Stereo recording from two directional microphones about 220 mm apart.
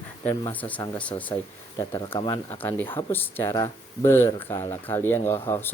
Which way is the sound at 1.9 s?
20° left (ahead or behind).